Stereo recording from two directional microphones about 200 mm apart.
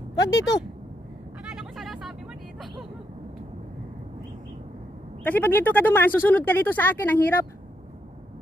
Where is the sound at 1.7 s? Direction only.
Centre (ahead or behind).